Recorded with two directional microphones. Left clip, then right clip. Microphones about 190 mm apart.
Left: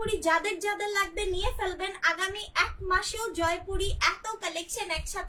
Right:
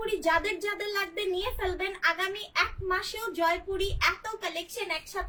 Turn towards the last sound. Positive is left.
turn(degrees=20)  # may be behind; listen again after turning